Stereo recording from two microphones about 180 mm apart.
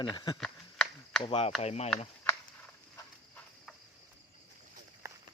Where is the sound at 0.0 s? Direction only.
25° left (ahead or behind).